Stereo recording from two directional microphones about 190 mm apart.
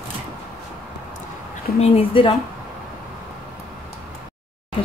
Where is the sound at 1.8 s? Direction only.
30° left (ahead or behind).